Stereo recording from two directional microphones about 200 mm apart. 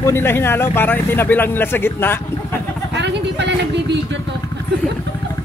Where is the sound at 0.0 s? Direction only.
10° left (ahead or behind).